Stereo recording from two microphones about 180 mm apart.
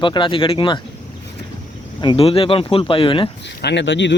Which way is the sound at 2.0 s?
30° left (ahead or behind).